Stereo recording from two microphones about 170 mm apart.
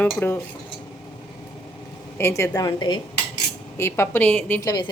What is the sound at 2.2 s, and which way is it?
Speech, 15° left (ahead or behind).